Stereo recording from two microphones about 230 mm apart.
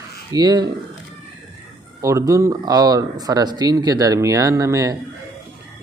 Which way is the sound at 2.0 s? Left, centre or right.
Centre.